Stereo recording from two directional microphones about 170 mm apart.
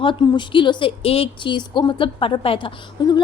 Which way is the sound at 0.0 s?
30° left (ahead or behind).